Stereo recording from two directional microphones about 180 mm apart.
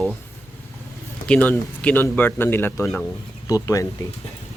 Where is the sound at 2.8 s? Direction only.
Centre (ahead or behind).